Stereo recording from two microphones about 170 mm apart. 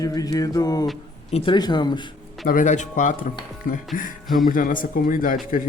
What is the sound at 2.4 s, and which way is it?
Speech, 50° left (ahead or behind).